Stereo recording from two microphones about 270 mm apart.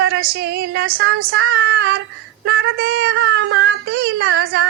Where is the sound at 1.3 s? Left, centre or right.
Right.